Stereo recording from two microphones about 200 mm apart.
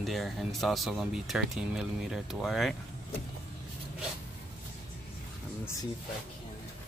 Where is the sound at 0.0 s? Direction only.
Centre (ahead or behind).